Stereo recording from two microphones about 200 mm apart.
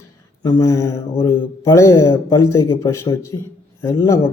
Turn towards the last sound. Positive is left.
turn(degrees=15)  # may be behind; listen again after turning